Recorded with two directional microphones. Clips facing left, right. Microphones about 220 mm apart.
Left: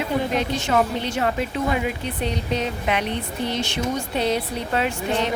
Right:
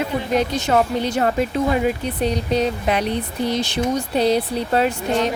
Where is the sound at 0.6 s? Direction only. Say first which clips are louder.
Right 3 dB; 40° right (ahead or behind).